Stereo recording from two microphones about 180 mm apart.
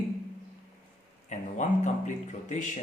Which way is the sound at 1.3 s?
40° left (ahead or behind).